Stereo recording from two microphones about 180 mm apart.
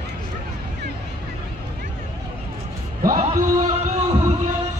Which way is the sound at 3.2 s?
40° right (ahead or behind).